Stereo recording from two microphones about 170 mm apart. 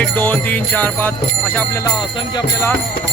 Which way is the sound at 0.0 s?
10° left (ahead or behind).